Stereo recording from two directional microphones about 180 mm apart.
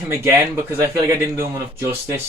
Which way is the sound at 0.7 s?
15° right (ahead or behind).